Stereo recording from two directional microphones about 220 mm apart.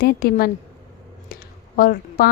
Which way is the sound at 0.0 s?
45° left (ahead or behind).